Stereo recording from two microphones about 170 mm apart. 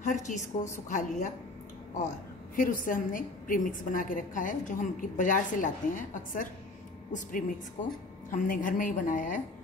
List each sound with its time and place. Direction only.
0.0 s a woman's voice: 45° left (ahead or behind)
2.5 s a woman's voice: 50° left (ahead or behind)